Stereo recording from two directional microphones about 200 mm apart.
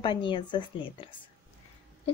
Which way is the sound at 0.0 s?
25° left (ahead or behind).